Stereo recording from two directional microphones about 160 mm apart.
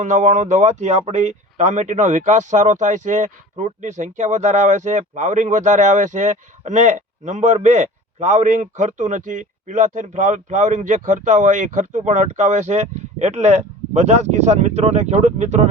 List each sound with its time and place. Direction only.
0.0 s speech: 50° right (ahead or behind)